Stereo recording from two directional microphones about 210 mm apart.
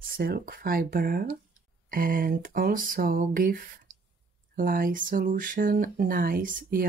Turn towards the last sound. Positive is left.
turn(degrees=-40)  # may be behind; listen again after turning